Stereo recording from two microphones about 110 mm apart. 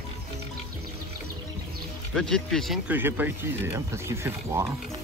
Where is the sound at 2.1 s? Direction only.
5° left (ahead or behind).